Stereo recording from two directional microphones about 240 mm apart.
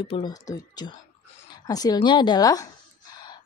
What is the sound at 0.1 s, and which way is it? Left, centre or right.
A woman's voice, centre.